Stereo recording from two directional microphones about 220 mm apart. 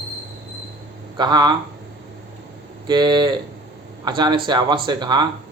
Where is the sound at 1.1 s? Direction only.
20° right (ahead or behind).